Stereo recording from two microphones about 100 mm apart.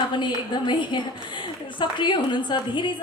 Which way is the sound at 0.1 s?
50° left (ahead or behind).